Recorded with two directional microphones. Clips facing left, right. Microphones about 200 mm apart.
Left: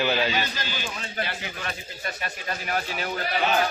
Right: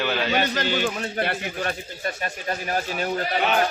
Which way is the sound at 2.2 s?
40° right (ahead or behind).